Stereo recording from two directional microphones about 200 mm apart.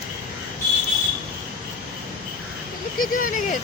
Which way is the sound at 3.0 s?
40° left (ahead or behind).